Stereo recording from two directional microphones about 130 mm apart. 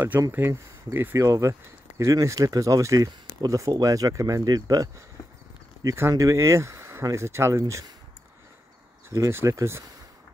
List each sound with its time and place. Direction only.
0.3 s speech: 20° right (ahead or behind)
9.1 s speech: 20° right (ahead or behind)